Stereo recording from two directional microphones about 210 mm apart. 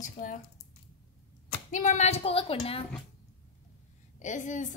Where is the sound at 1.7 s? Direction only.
35° left (ahead or behind).